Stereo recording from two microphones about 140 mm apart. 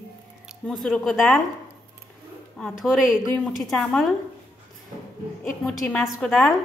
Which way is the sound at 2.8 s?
5° right (ahead or behind).